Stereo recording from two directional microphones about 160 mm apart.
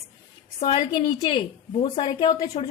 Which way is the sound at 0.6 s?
30° left (ahead or behind).